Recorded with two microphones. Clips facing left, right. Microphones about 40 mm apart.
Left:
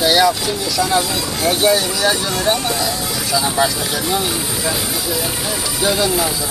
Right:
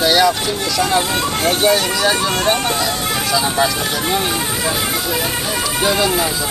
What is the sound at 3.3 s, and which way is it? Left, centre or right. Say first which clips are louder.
Speech: left 1 dB; centre.